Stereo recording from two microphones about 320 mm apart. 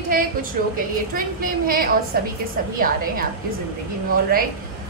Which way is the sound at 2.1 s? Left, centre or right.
Right.